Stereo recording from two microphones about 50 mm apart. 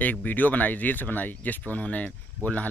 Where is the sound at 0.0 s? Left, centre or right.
Left.